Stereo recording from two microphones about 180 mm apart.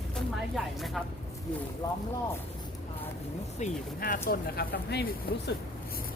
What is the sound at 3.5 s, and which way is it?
Speech, 45° left (ahead or behind).